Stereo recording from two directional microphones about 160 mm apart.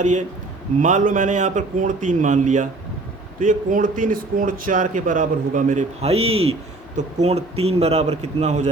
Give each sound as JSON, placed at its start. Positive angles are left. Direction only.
{"t": 0.0, "sound": "speech", "side_deg": -50}